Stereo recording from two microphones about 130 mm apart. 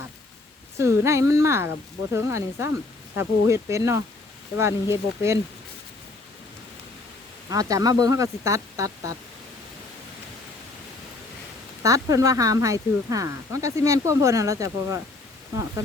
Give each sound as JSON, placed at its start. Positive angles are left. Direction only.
{"t": 0.8, "sound": "speech", "side_deg": -20}
{"t": 7.5, "sound": "speech", "side_deg": -25}
{"t": 11.8, "sound": "speech", "side_deg": -25}